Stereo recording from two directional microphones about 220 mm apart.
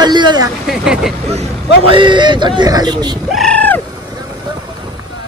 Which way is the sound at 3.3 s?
5° left (ahead or behind).